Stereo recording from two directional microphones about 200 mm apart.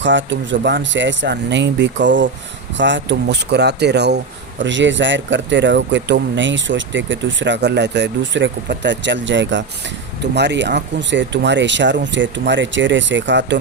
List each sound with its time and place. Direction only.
0.0 s speech: 65° right (ahead or behind)